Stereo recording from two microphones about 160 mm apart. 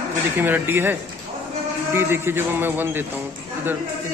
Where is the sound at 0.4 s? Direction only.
15° right (ahead or behind).